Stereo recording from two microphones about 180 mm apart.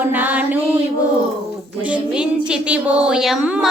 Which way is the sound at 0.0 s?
10° right (ahead or behind).